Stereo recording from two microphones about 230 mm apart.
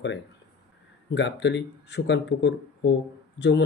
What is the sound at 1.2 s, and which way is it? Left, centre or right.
Speech, left.